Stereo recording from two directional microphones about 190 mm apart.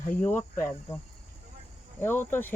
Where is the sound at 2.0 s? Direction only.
10° left (ahead or behind).